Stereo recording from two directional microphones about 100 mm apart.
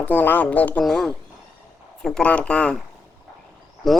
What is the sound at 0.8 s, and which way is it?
Speech, 5° left (ahead or behind).